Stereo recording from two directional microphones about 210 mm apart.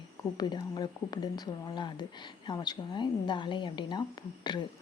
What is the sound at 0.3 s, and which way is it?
Speech, 20° left (ahead or behind).